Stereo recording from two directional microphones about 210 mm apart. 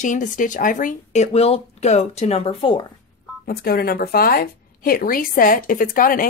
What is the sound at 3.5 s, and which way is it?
Speech, 45° left (ahead or behind).